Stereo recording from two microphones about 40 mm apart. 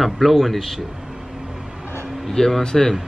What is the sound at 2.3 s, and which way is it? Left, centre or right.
Speech, centre.